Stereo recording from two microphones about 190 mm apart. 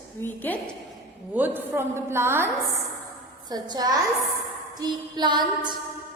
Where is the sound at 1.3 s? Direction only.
10° right (ahead or behind).